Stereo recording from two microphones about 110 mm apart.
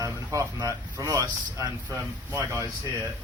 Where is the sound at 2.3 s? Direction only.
15° right (ahead or behind).